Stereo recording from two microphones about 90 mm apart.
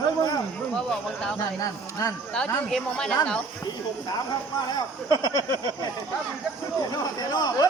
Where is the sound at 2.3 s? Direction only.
5° left (ahead or behind).